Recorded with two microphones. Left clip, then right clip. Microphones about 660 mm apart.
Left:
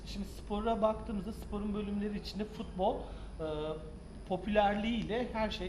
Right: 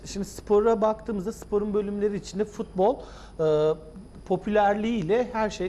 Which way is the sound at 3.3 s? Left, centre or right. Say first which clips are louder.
Right 16 dB; right.